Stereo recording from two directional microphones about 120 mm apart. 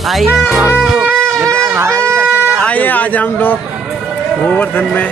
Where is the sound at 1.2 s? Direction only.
25° right (ahead or behind).